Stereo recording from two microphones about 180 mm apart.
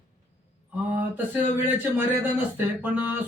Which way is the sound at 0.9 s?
10° right (ahead or behind).